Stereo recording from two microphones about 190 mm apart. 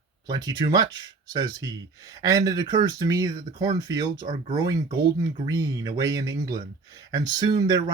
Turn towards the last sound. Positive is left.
turn(degrees=-20)  # may be behind; listen again after turning